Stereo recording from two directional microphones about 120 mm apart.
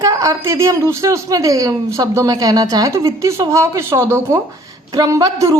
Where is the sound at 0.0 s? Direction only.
30° right (ahead or behind).